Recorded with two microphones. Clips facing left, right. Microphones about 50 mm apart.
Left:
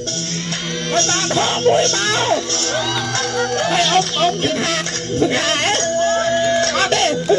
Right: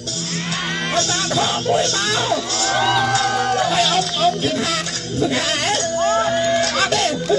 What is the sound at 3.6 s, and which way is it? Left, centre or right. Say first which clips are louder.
Speech: left 2 dB; left.